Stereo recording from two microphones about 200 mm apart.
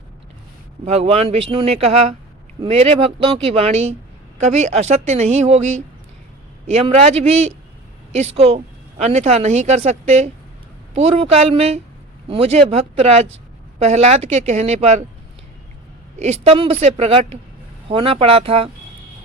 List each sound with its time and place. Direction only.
0.9 s a woman's voice: 30° right (ahead or behind)
16.1 s a woman's voice: 35° right (ahead or behind)